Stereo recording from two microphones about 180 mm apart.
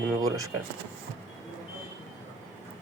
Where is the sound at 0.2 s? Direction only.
20° right (ahead or behind).